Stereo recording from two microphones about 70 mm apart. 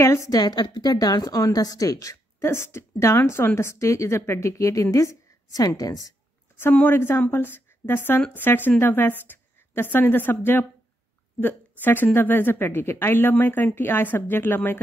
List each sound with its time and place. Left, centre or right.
0.0 s a woman's voice: left
0.3 s a woman's voice: left
2.4 s a woman's voice: left
6.7 s a woman's voice: left